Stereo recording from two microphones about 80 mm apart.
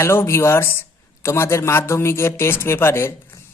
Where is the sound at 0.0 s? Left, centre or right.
Left.